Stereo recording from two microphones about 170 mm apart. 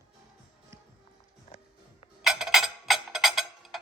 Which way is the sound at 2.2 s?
Centre (ahead or behind).